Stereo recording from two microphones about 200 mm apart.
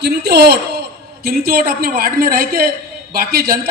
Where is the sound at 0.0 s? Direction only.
55° right (ahead or behind).